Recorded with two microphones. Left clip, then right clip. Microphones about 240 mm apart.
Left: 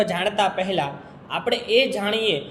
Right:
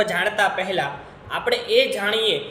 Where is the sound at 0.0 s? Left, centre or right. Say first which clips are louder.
Right 1 dB; centre.